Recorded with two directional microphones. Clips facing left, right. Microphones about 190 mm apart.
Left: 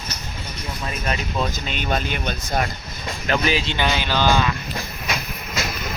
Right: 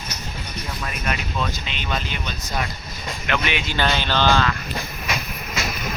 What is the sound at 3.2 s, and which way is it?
Speech, 35° left (ahead or behind).